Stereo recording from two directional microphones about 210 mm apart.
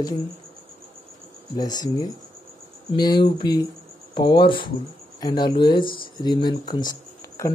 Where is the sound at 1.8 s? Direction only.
15° left (ahead or behind).